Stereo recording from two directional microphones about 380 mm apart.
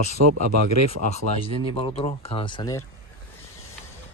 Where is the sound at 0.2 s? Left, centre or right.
Right.